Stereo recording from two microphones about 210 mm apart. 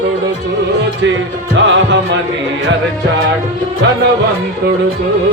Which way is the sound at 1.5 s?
60° right (ahead or behind).